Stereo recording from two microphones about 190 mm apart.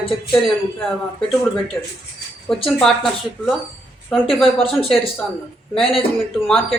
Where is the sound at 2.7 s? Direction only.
Centre (ahead or behind).